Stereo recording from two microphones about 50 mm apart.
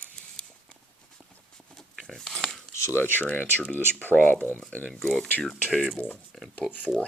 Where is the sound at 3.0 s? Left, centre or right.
Left.